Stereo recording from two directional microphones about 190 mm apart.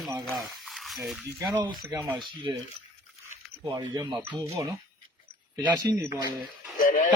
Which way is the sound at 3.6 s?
20° right (ahead or behind).